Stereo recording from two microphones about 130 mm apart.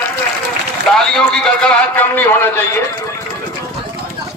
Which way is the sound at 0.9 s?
5° left (ahead or behind).